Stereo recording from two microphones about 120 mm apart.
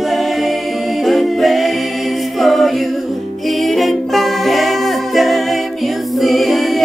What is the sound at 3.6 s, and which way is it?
Music, centre (ahead or behind).